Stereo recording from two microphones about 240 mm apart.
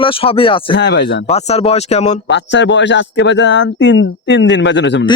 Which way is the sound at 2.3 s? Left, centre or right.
Left.